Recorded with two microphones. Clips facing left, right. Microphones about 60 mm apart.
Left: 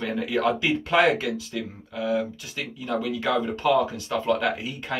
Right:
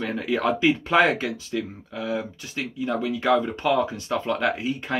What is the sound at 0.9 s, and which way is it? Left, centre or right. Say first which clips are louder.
Speech: left 3 dB; right.